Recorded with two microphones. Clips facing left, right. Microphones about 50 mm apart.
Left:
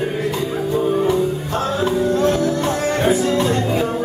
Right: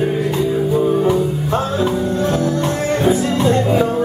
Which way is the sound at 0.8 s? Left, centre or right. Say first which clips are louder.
Right 1 dB; centre.